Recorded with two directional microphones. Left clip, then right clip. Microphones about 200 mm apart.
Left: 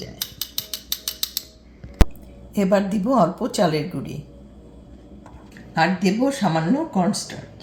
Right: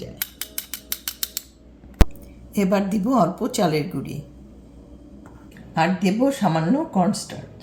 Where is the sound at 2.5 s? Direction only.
15° left (ahead or behind).